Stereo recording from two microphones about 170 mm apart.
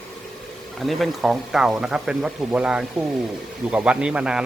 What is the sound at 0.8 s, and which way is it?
Speech, centre (ahead or behind).